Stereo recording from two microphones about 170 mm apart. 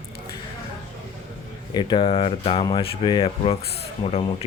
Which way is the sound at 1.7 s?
25° left (ahead or behind).